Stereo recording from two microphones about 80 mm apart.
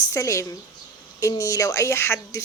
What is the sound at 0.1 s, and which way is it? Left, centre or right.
A woman's voice, left.